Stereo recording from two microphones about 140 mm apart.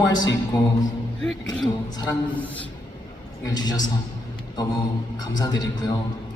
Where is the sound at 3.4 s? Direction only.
30° left (ahead or behind).